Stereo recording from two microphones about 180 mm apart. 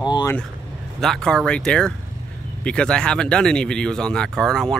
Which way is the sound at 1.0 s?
5° left (ahead or behind).